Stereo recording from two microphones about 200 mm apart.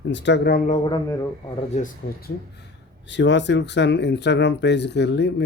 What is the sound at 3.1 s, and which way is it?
Speech, 65° left (ahead or behind).